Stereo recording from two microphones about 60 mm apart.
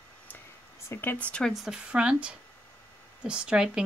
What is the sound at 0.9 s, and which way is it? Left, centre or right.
Speech, left.